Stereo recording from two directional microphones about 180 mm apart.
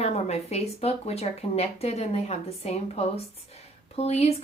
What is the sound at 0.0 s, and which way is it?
Speech, 35° left (ahead or behind).